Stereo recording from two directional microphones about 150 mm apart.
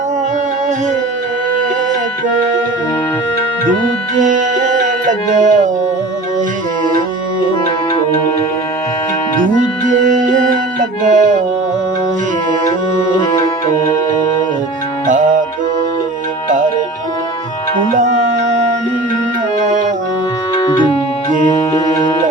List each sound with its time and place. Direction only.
4.2 s music: 55° right (ahead or behind)
9.6 s music: 60° right (ahead or behind)
17.9 s music: 50° right (ahead or behind)
20.6 s music: 30° left (ahead or behind)